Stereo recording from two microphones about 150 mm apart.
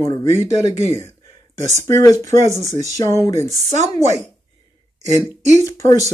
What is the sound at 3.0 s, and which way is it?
Speech, 20° left (ahead or behind).